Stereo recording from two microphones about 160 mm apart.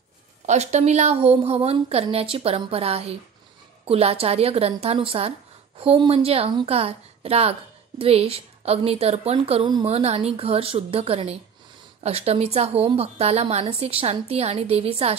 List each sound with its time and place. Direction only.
0.5 s a woman's voice: 45° right (ahead or behind)